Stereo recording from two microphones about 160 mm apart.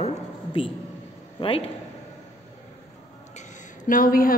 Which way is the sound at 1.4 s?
35° left (ahead or behind).